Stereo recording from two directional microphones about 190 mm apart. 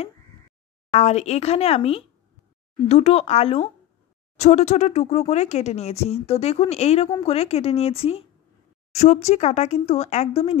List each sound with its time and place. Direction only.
0.9 s a woman's voice: 35° left (ahead or behind)